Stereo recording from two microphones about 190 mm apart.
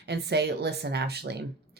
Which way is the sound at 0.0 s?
60° right (ahead or behind).